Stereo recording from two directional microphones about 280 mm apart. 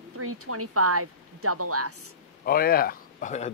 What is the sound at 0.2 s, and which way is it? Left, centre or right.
Speech, right.